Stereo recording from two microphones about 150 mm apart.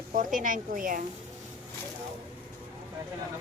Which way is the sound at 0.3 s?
65° right (ahead or behind).